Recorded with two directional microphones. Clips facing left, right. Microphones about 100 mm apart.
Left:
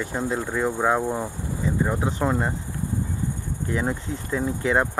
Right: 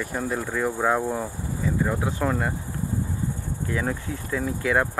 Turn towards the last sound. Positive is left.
turn(degrees=20)  # may be behind; listen again after turning